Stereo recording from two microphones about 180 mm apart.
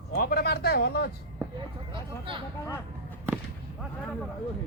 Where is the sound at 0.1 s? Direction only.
55° left (ahead or behind).